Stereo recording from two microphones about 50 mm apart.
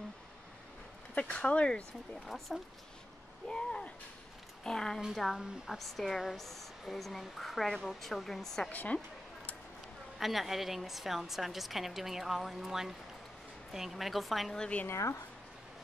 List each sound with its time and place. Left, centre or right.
1.1 s speech: left
2.2 s speech: centre
3.4 s a sound: centre
4.6 s speech: centre
5.1 s speech: centre
8.6 s speech: left
10.1 s speech: centre
14.9 s speech: left